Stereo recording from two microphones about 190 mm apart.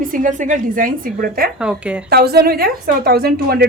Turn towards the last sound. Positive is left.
turn(degrees=-55)  # may be behind; listen again after turning